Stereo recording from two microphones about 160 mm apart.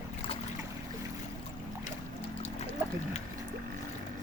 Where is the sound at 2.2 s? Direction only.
40° left (ahead or behind).